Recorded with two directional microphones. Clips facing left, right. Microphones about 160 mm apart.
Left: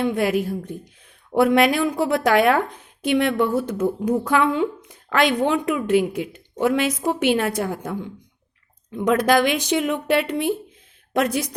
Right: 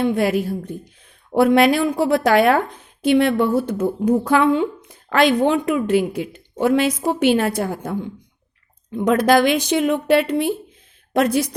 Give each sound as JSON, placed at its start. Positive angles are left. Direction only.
{"t": 0.0, "sound": "speech", "side_deg": -30}
{"t": 9.0, "sound": "a woman's voice", "side_deg": -30}